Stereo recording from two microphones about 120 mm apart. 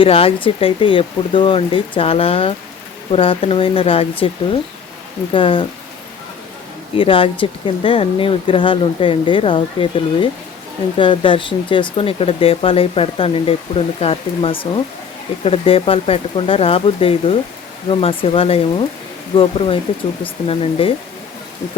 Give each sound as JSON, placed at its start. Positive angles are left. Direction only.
{"t": 0.0, "sound": "speech", "side_deg": 50}
{"t": 6.9, "sound": "speech", "side_deg": 50}